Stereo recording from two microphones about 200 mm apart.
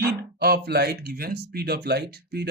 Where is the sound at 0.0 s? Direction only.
50° right (ahead or behind).